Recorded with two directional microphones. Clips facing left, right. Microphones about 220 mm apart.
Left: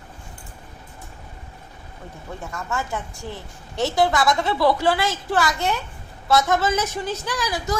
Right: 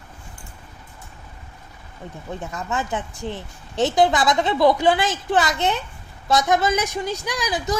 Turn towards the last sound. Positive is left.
turn(degrees=-15)  # may be behind; listen again after turning